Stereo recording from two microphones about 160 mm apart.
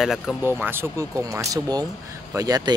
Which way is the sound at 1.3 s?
20° right (ahead or behind).